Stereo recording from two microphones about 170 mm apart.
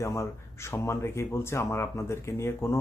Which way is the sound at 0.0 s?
15° left (ahead or behind).